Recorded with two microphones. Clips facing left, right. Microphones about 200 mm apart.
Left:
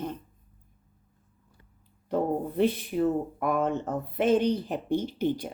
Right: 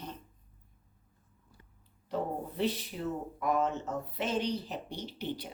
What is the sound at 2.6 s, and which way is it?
Speech, 55° left (ahead or behind).